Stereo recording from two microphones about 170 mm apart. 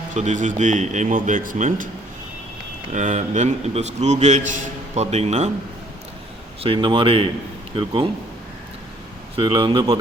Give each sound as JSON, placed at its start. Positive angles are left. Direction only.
{"t": 0.1, "sound": "a man's voice", "side_deg": -45}
{"t": 2.9, "sound": "a man's voice", "side_deg": -45}
{"t": 6.6, "sound": "speech", "side_deg": -30}
{"t": 9.3, "sound": "speech", "side_deg": -30}